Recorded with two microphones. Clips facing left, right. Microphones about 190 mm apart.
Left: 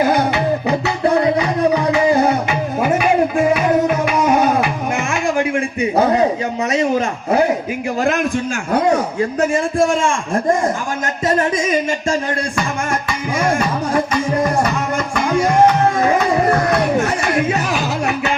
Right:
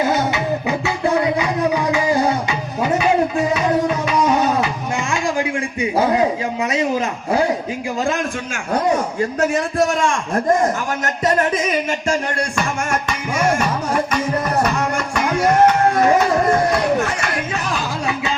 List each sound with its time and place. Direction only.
0.0 s music: 25° right (ahead or behind)
1.0 s music: 30° left (ahead or behind)
4.2 s music: 10° left (ahead or behind)
4.6 s a sound: 25° right (ahead or behind)
5.8 s a sound: 25° left (ahead or behind)
7.3 s a man's voice: 25° left (ahead or behind)
9.4 s a man's voice: 50° left (ahead or behind)
14.9 s music: 50° left (ahead or behind)
17.7 s a sound: 65° left (ahead or behind)